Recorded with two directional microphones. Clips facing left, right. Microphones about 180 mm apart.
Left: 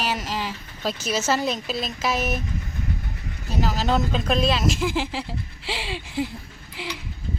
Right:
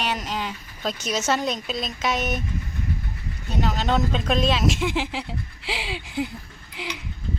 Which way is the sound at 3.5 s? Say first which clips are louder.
Even; 5° left (ahead or behind).